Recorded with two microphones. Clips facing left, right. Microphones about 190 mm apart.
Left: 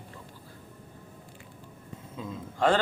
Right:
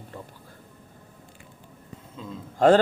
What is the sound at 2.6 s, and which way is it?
Speech, 40° right (ahead or behind).